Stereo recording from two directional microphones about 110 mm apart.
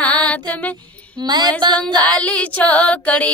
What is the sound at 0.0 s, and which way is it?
Music, 10° left (ahead or behind).